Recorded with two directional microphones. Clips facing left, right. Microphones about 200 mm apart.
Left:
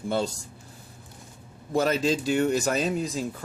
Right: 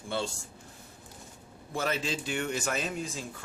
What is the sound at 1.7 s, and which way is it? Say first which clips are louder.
Speech: left 8 dB; 40° left (ahead or behind).